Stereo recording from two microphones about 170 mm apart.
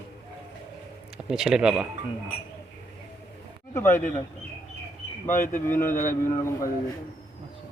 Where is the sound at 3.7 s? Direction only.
15° left (ahead or behind).